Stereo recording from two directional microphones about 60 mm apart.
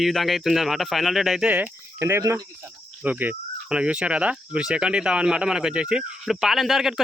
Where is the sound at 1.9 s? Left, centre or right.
Right.